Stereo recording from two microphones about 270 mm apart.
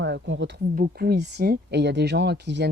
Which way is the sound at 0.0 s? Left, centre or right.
Right.